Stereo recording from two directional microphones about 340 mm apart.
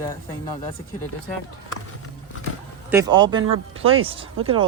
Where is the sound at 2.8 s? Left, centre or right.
Centre.